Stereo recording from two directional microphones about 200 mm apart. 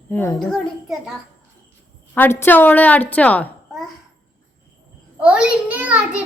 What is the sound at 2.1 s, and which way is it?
A woman's voice, 10° left (ahead or behind).